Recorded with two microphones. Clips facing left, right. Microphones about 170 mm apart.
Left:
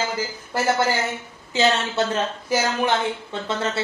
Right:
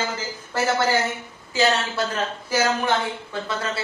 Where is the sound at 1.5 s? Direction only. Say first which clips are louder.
Left 1 dB; 25° left (ahead or behind).